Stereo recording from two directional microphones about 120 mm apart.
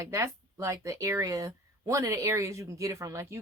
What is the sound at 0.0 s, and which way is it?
Speech, 25° right (ahead or behind).